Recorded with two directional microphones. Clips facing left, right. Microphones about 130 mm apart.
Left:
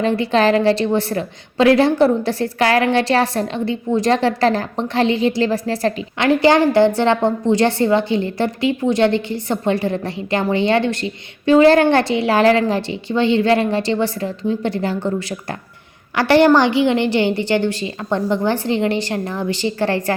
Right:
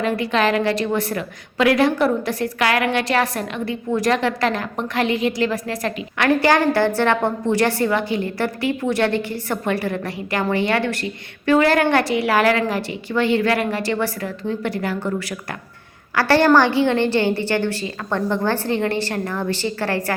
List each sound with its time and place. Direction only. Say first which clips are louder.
0.0 s a woman's voice: left 4 dB; 30° left (ahead or behind)